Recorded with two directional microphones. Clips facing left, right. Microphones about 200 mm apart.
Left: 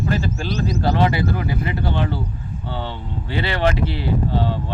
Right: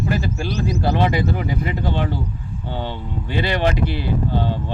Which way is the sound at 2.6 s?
15° right (ahead or behind).